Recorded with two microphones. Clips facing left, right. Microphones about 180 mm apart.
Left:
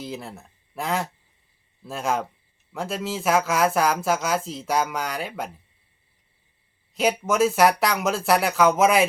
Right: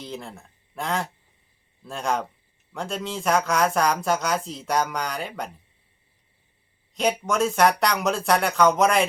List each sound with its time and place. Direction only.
0.0 s speech: 5° left (ahead or behind)
6.9 s speech: 5° left (ahead or behind)